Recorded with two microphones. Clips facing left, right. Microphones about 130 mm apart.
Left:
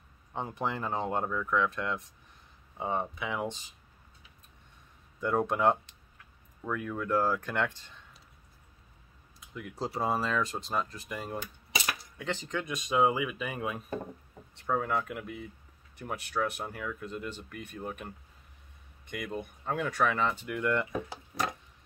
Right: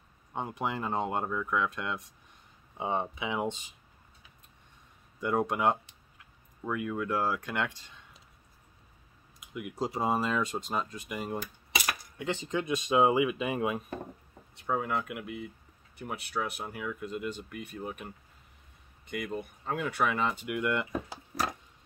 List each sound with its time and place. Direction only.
0.3 s speech: 10° right (ahead or behind)
5.2 s speech: 10° right (ahead or behind)
9.4 s speech: 15° right (ahead or behind)
14.7 s speech: 5° right (ahead or behind)